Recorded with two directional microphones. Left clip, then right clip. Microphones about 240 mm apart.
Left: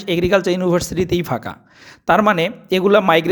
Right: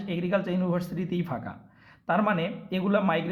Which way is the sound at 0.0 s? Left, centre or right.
Left.